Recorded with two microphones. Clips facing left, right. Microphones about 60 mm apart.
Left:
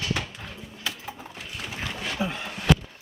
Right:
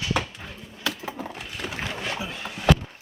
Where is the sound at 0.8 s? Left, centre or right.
Right.